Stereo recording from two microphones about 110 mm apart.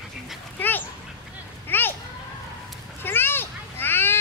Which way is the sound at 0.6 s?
15° left (ahead or behind).